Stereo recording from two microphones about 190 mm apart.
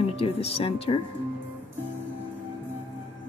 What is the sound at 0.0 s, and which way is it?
Speech, 30° left (ahead or behind).